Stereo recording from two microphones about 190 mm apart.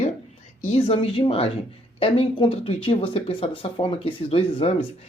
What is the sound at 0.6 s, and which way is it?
Speech, 30° left (ahead or behind).